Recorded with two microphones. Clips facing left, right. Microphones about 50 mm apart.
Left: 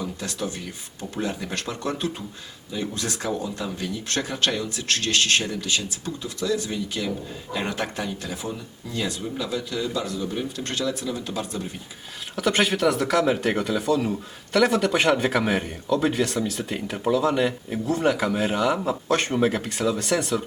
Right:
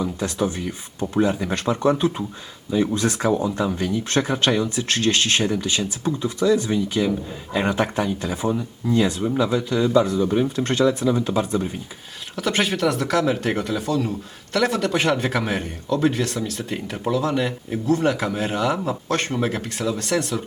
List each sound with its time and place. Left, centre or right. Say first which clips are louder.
0.0 s speech: right 6 dB; right
12.4 s speech: even; centre